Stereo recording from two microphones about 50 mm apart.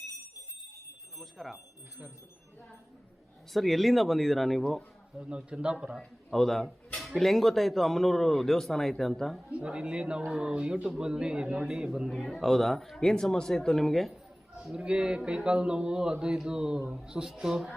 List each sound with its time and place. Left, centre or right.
1.2 s speech: centre
3.5 s speech: centre
5.2 s speech: right
6.3 s speech: centre
9.5 s a man's voice: right
12.0 s speech: centre
14.7 s a man's voice: centre